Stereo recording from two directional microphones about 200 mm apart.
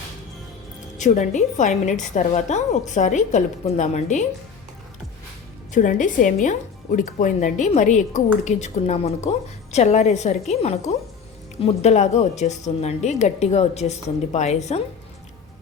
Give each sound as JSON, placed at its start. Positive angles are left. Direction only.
{"t": 0.9, "sound": "speech", "side_deg": 35}
{"t": 5.7, "sound": "speech", "side_deg": 40}